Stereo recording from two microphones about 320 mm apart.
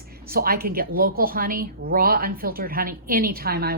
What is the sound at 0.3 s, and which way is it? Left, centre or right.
A woman's voice, right.